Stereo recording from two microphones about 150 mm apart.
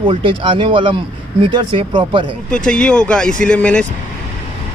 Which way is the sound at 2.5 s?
5° left (ahead or behind).